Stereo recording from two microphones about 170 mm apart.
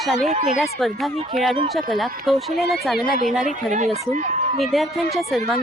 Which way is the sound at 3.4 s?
45° right (ahead or behind).